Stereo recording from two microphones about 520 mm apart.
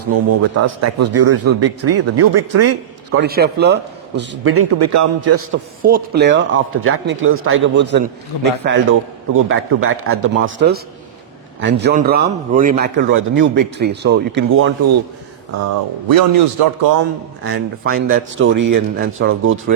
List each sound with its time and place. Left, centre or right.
0.0 s a man's voice: right
5.8 s a man's voice: centre
15.6 s speech: right
17.5 s a man's voice: centre